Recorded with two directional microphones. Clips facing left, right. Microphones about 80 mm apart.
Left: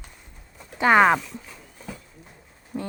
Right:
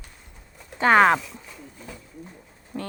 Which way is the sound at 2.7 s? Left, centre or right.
Centre.